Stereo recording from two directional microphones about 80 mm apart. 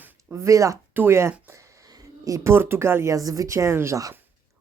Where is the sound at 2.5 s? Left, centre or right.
Right.